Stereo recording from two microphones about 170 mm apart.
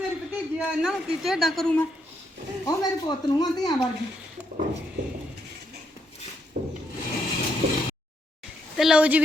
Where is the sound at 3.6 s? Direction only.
25° left (ahead or behind).